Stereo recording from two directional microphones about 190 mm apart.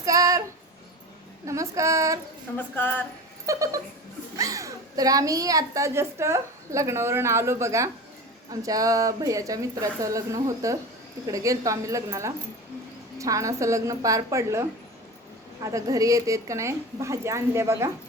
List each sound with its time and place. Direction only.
0.0 s a sound: 20° right (ahead or behind)
1.5 s child singing: 15° right (ahead or behind)
2.6 s speech: 10° left (ahead or behind)
3.4 s dog: 15° right (ahead or behind)
4.4 s a woman's voice: 15° right (ahead or behind)